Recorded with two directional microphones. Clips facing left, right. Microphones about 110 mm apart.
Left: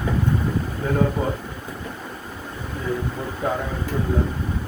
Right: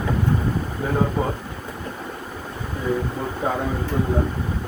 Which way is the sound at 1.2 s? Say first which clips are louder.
Right 1 dB; 20° right (ahead or behind).